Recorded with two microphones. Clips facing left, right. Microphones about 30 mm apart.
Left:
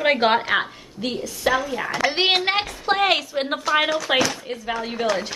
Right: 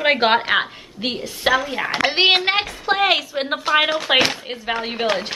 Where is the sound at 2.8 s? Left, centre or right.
Centre.